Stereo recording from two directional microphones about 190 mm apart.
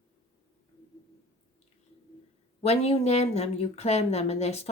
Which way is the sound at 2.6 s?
35° left (ahead or behind).